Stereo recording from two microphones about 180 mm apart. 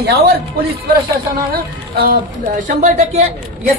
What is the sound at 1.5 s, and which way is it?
Speech, 55° right (ahead or behind).